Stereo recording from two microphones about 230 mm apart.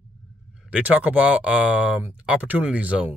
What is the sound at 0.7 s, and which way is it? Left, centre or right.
Speech, centre.